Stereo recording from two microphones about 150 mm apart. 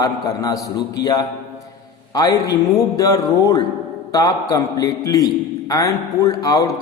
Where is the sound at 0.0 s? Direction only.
25° left (ahead or behind).